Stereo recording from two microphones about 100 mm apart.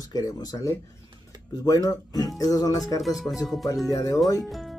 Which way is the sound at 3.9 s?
35° left (ahead or behind).